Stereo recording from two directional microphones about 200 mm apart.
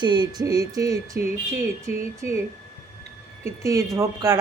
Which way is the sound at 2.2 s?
15° right (ahead or behind).